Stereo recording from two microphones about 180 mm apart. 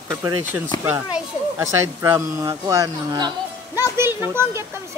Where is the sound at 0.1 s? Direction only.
15° right (ahead or behind).